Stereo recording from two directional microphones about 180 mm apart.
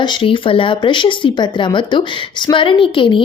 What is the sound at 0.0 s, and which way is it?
Speech, 25° left (ahead or behind).